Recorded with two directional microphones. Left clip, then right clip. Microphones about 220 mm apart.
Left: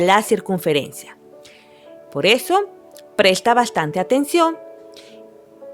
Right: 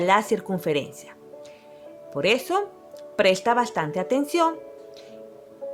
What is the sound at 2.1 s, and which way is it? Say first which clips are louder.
Speech: left 6 dB; 35° left (ahead or behind).